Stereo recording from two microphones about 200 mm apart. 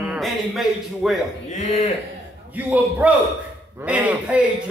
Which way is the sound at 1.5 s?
35° left (ahead or behind).